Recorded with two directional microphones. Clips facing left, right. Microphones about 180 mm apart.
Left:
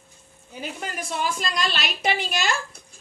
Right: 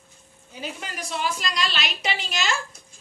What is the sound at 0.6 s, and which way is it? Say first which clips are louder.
A woman's voice: left 2 dB; 50° left (ahead or behind).